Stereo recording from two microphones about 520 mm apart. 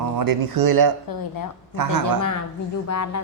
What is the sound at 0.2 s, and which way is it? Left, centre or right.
A man's voice, right.